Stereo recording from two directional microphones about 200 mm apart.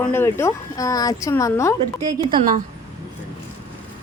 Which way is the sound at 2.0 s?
20° right (ahead or behind).